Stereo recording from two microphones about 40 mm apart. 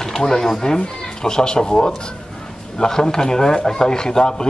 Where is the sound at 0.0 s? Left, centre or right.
Centre.